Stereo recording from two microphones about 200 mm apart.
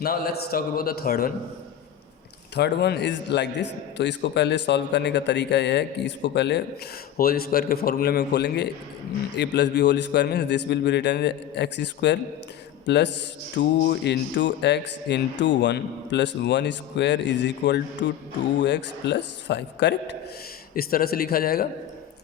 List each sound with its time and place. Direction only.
0.0 s a man's voice: 50° left (ahead or behind)
2.6 s speech: 55° left (ahead or behind)
7.2 s a man's voice: 50° left (ahead or behind)